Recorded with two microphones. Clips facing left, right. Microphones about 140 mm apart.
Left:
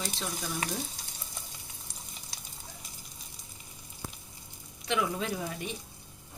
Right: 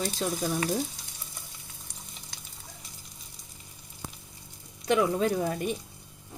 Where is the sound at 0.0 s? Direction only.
45° right (ahead or behind).